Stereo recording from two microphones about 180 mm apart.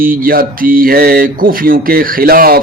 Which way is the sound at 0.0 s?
50° right (ahead or behind).